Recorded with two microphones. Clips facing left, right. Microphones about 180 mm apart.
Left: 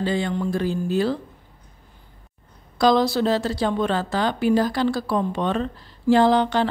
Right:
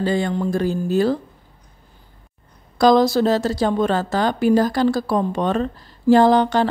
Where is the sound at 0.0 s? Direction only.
45° right (ahead or behind).